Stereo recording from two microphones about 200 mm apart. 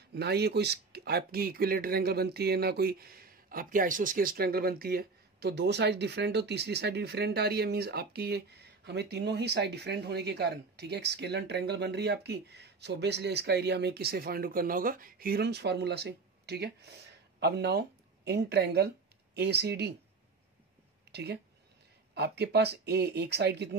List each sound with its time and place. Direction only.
0.1 s speech: 55° right (ahead or behind)
21.1 s speech: 55° right (ahead or behind)